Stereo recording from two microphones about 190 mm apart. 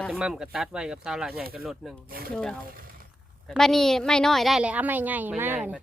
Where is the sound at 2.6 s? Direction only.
50° right (ahead or behind).